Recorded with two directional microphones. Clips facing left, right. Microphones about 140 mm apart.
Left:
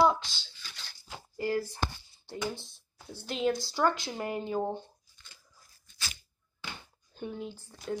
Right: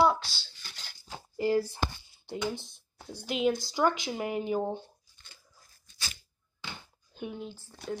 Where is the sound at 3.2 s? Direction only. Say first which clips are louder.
Right 2 dB; 10° right (ahead or behind).